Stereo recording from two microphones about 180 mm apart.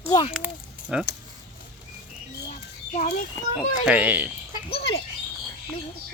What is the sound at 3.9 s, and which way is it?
Speech, 10° right (ahead or behind).